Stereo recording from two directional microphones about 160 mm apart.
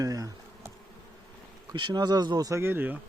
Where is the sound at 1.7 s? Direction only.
30° right (ahead or behind); by 3.0 s 10° right (ahead or behind).